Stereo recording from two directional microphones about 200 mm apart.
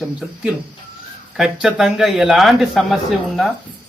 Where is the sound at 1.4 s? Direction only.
5° right (ahead or behind).